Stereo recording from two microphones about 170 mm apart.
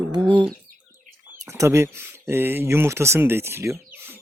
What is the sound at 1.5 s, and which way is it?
Speech, 15° right (ahead or behind).